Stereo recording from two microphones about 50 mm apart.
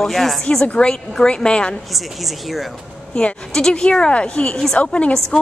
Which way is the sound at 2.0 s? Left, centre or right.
Centre.